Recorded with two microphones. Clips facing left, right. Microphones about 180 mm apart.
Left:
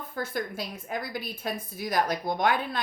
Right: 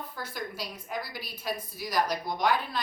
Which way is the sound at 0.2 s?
50° left (ahead or behind).